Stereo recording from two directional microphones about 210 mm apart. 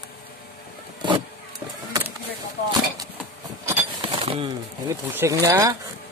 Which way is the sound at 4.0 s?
25° right (ahead or behind).